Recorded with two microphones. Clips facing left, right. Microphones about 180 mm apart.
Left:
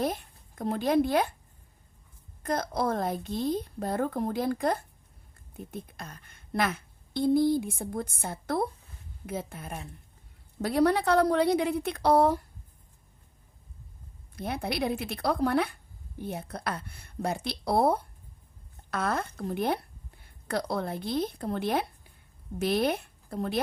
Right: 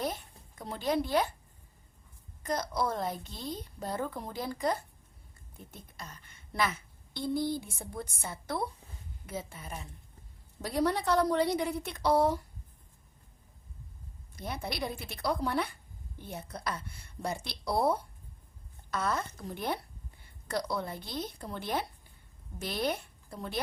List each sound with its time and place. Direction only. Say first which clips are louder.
0.0 s speech: left 5 dB; 50° left (ahead or behind)
2.4 s a woman's voice: left 3 dB; 55° left (ahead or behind)
14.3 s a woman's voice: left 6 dB; 60° left (ahead or behind)